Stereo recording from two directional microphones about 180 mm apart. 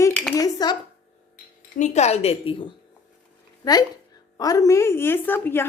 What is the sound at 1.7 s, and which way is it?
A woman's voice, 40° left (ahead or behind).